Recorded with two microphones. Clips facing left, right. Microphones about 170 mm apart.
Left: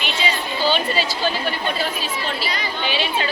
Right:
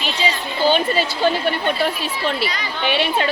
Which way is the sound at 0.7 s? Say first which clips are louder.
Right 4 dB; 55° right (ahead or behind).